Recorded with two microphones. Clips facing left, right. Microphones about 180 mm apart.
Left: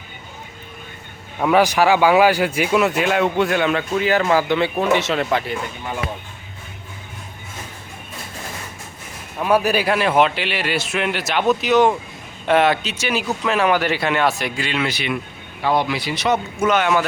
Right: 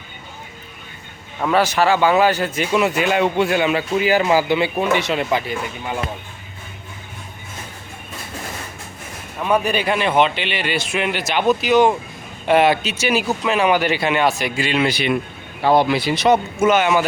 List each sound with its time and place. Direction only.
1.4 s speech: 10° left (ahead or behind)
2.8 s speech: centre (ahead or behind)
9.4 s speech: 5° left (ahead or behind)
14.8 s speech: 35° right (ahead or behind)
16.6 s speech: 5° right (ahead or behind)